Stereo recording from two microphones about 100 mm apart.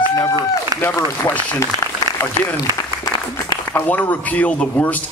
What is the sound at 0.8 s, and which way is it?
Speech, 20° left (ahead or behind).